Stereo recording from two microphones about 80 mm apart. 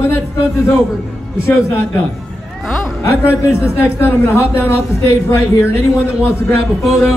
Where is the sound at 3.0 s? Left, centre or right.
Left.